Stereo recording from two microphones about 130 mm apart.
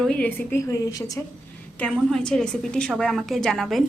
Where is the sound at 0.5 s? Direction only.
25° left (ahead or behind).